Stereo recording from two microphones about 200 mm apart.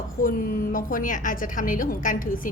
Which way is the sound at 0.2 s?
45° left (ahead or behind).